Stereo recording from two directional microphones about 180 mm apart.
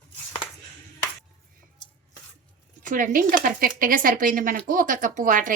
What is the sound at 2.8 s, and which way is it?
Speech, 50° right (ahead or behind).